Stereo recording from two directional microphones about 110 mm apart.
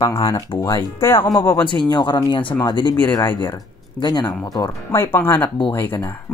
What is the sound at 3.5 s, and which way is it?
Speech, 40° left (ahead or behind).